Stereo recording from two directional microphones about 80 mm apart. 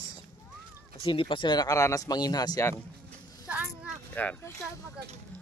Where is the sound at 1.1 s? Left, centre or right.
Left.